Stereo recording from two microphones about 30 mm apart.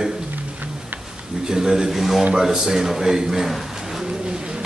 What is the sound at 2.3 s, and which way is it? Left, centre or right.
A man's voice, right.